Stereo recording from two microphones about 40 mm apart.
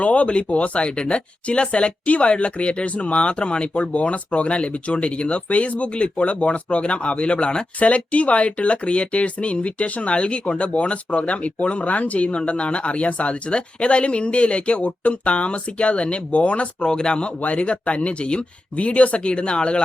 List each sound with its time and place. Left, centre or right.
0.0 s speech: left
16.8 s speech: centre